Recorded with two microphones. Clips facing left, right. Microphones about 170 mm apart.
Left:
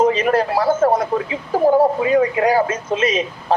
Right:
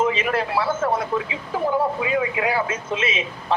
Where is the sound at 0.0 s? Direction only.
40° left (ahead or behind).